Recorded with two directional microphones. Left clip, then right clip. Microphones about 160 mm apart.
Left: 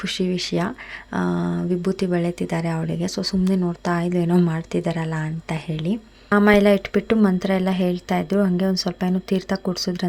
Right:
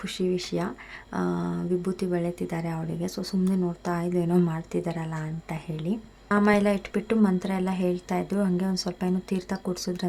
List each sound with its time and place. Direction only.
0.0 s speech: 25° left (ahead or behind)